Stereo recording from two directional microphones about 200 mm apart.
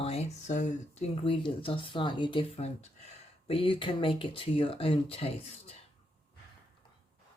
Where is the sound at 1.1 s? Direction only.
25° left (ahead or behind).